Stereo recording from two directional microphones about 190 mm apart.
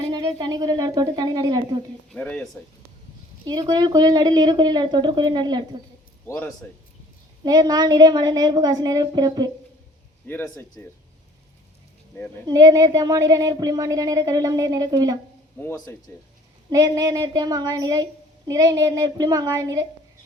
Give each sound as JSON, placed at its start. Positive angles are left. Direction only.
{"t": 0.1, "sound": "a woman's voice", "side_deg": -20}
{"t": 2.1, "sound": "speech", "side_deg": 5}
{"t": 3.4, "sound": "a woman's voice", "side_deg": -20}
{"t": 6.2, "sound": "a man's voice", "side_deg": 10}
{"t": 7.4, "sound": "a woman's voice", "side_deg": -20}
{"t": 10.2, "sound": "speech", "side_deg": 10}
{"t": 12.5, "sound": "a woman's voice", "side_deg": -20}
{"t": 15.6, "sound": "speech", "side_deg": 15}
{"t": 16.6, "sound": "a woman's voice", "side_deg": -20}